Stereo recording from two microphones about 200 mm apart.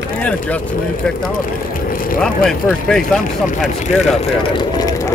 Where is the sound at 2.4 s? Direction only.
Centre (ahead or behind).